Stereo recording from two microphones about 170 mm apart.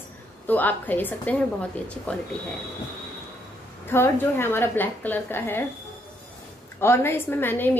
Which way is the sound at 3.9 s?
15° left (ahead or behind).